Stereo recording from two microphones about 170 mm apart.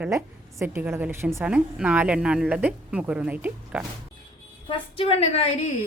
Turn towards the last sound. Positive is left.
turn(degrees=40)  # may be behind; listen again after turning